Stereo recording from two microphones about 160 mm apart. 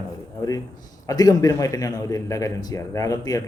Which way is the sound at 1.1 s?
25° left (ahead or behind).